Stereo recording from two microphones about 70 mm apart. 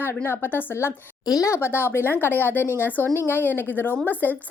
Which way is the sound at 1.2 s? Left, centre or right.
Left.